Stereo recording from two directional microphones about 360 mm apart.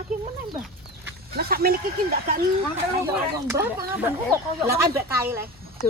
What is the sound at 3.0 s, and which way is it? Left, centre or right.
A woman's voice, centre.